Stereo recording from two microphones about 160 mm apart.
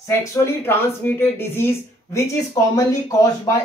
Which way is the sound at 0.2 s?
15° left (ahead or behind).